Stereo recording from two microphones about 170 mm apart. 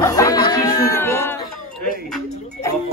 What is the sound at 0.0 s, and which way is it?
Music, 20° left (ahead or behind).